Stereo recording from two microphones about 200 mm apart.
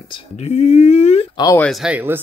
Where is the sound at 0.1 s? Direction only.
35° left (ahead or behind).